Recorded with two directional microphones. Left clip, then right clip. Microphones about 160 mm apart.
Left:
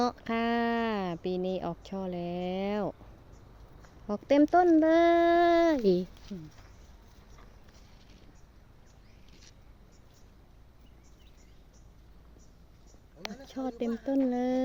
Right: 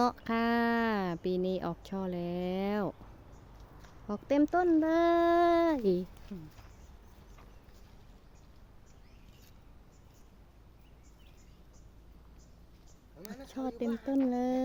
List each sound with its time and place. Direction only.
0.0 s speech: 10° right (ahead or behind)
3.8 s speech: centre (ahead or behind)
5.7 s speech: 15° left (ahead or behind)
13.4 s speech: 5° right (ahead or behind)